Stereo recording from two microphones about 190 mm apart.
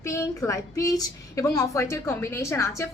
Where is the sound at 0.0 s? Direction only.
15° left (ahead or behind).